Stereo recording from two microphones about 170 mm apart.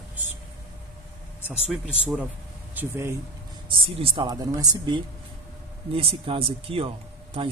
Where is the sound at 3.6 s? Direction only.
30° right (ahead or behind).